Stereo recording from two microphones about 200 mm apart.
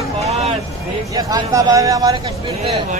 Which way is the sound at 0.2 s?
35° right (ahead or behind).